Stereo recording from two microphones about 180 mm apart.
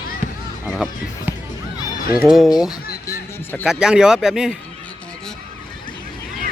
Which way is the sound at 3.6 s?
5° right (ahead or behind).